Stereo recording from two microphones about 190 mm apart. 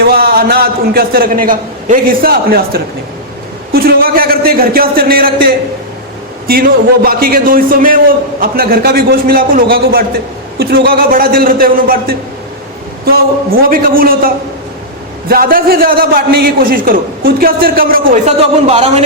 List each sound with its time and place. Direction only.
0.0 s a man's voice: 55° right (ahead or behind)
6.5 s a man's voice: 55° right (ahead or behind); by 19.0 s 35° right (ahead or behind)